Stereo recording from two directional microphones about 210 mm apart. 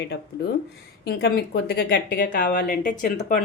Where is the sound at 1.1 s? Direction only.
50° left (ahead or behind).